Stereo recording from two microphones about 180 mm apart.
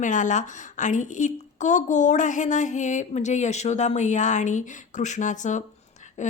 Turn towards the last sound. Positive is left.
turn(degrees=40)  # may be behind; listen again after turning